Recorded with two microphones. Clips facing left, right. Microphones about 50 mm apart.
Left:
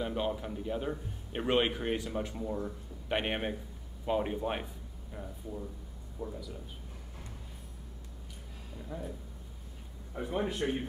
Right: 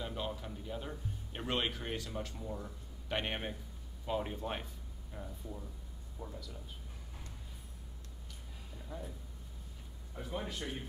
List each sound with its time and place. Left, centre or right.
0.0 s a man's voice: centre
8.7 s speech: centre
10.1 s speech: left